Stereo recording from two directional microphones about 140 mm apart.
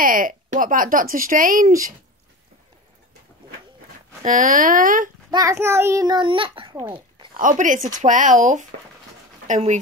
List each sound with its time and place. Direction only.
0.0 s a woman's voice: 75° right (ahead or behind)
4.2 s a woman's voice: 75° right (ahead or behind)
5.3 s a child's voice: 25° right (ahead or behind)
7.3 s speech: 70° right (ahead or behind)